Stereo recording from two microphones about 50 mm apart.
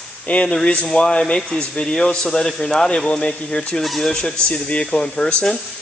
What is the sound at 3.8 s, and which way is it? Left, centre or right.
Speech, centre.